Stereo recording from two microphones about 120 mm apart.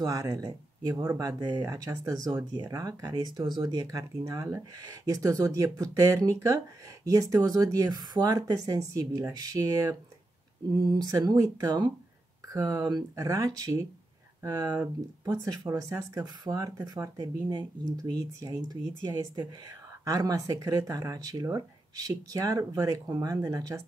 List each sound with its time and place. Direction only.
0.0 s speech: 30° right (ahead or behind)